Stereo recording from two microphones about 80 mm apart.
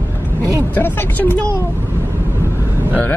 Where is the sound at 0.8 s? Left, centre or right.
Left.